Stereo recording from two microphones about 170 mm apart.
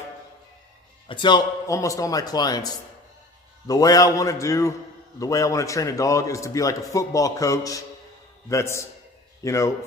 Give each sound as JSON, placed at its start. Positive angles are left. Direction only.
{"t": 1.0, "sound": "a man's voice", "side_deg": 30}